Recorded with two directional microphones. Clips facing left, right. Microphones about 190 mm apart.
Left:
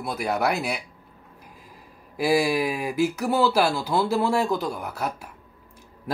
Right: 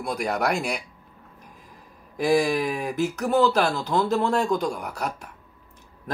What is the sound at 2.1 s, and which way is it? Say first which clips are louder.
Speech: even; 10° left (ahead or behind).